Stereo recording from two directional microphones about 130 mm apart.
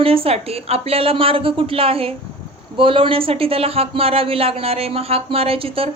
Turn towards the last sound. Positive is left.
turn(degrees=-45)  # may be behind; listen again after turning